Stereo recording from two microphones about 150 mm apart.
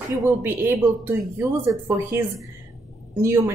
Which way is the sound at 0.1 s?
20° right (ahead or behind).